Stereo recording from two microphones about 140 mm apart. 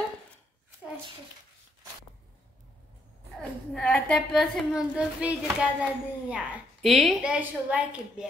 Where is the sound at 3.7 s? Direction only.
5° left (ahead or behind).